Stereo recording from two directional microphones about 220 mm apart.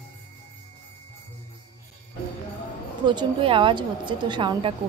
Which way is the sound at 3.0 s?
20° right (ahead or behind).